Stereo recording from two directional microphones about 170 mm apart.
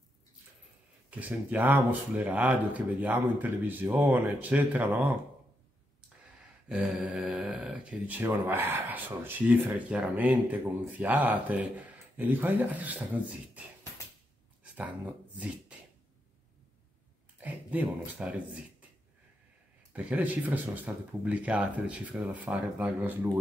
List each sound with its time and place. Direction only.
1.1 s speech: 10° right (ahead or behind)
6.7 s speech: 5° right (ahead or behind)
17.4 s speech: 10° right (ahead or behind)
19.9 s speech: 10° right (ahead or behind)